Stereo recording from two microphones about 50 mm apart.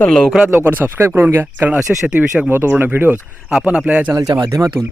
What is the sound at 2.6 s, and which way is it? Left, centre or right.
Speech, right.